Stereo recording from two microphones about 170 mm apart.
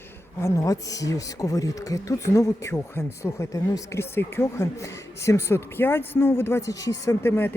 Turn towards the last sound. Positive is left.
turn(degrees=15)  # may be behind; listen again after turning